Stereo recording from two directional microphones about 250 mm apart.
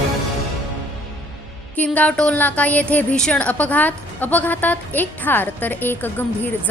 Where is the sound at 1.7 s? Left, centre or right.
Centre.